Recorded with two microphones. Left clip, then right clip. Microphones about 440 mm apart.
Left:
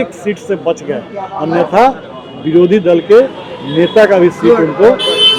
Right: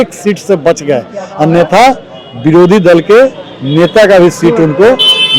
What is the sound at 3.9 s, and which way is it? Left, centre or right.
Speech, right.